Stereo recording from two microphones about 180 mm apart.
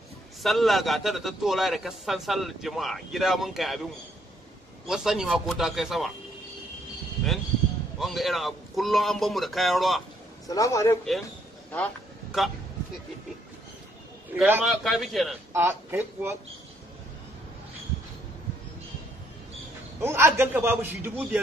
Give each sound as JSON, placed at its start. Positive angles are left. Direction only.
{"t": 0.4, "sound": "a man's voice", "side_deg": 0}
{"t": 4.8, "sound": "a man's voice", "side_deg": -5}
{"t": 8.0, "sound": "a man's voice", "side_deg": 0}
{"t": 10.5, "sound": "a man's voice", "side_deg": 20}
{"t": 11.7, "sound": "a sound", "side_deg": 0}
{"t": 14.3, "sound": "a man's voice", "side_deg": -10}
{"t": 15.5, "sound": "a man's voice", "side_deg": -15}
{"t": 20.0, "sound": "a man's voice", "side_deg": -15}